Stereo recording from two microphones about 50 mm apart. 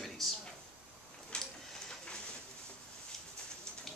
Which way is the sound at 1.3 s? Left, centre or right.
Centre.